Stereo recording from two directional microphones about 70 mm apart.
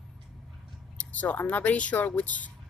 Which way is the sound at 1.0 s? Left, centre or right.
Centre.